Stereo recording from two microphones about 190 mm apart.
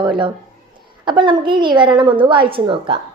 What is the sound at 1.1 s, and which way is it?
A woman's voice, 25° right (ahead or behind).